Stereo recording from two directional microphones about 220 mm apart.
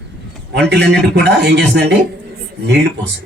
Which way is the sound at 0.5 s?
50° right (ahead or behind).